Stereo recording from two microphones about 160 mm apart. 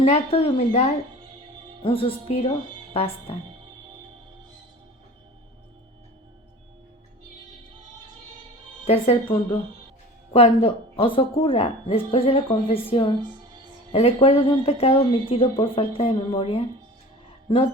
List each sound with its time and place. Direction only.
0.0 s speech: 40° left (ahead or behind)
8.8 s speech: 35° left (ahead or behind)